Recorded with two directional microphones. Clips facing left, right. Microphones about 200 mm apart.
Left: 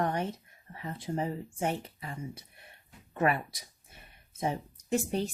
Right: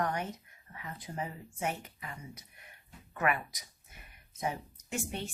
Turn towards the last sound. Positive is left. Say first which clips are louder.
# left 8 dB
turn(degrees=35)  # may be behind; listen again after turning